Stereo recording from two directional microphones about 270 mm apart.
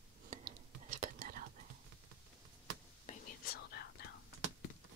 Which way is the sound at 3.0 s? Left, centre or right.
Left.